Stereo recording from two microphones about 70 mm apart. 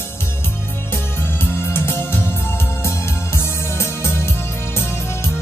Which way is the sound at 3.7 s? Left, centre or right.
Left.